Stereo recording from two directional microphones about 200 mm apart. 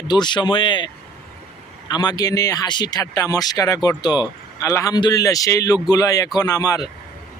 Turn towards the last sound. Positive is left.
turn(degrees=15)  # may be behind; listen again after turning